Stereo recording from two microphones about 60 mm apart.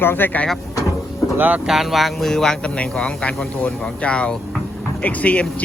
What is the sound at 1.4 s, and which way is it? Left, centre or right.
Speech, right.